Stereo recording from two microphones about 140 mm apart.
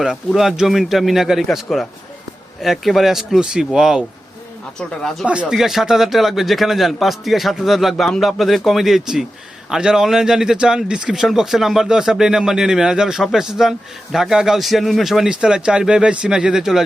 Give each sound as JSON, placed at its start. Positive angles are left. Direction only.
{"t": 0.3, "sound": "speech", "side_deg": 0}
{"t": 5.2, "sound": "speech", "side_deg": -10}